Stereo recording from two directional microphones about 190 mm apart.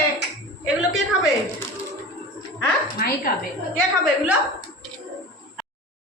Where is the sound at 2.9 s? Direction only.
50° left (ahead or behind).